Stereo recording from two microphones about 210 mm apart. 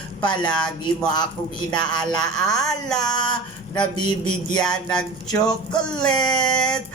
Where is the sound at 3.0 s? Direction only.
20° left (ahead or behind).